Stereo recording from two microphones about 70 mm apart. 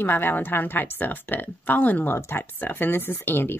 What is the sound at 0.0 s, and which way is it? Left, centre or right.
Speech, left.